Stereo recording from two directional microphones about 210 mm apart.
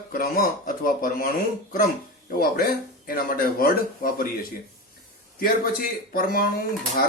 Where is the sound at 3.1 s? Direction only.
45° left (ahead or behind).